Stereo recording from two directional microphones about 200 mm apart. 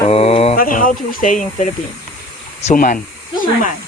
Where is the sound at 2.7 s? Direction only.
40° left (ahead or behind).